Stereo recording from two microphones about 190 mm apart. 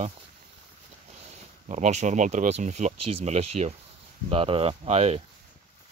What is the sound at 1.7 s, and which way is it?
Speech, 40° right (ahead or behind).